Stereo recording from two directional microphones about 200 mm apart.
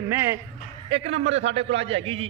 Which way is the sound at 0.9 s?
30° right (ahead or behind).